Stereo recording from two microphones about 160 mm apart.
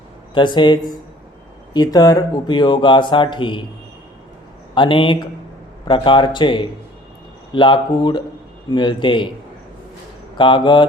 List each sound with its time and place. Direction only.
0.3 s speech: 30° left (ahead or behind)
4.7 s speech: 30° left (ahead or behind)
10.3 s speech: 30° left (ahead or behind)